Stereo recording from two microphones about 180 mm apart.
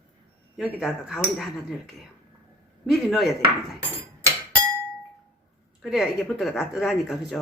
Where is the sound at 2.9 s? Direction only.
Centre (ahead or behind).